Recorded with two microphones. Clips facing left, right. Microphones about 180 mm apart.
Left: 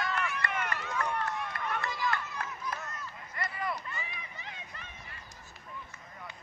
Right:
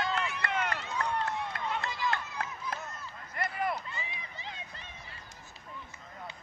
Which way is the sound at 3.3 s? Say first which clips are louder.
Right 4 dB; 55° right (ahead or behind).